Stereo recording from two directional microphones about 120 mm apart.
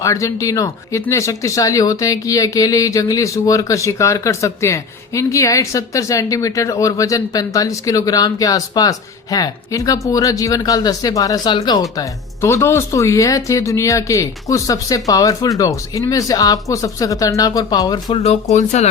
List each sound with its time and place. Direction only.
0.0 s speech: 25° left (ahead or behind)
11.4 s speech: 40° left (ahead or behind)
18.1 s speech: 60° left (ahead or behind)